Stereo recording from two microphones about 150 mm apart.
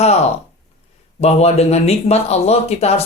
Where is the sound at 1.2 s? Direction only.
45° left (ahead or behind).